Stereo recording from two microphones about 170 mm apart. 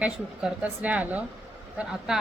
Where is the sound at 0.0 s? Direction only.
5° right (ahead or behind).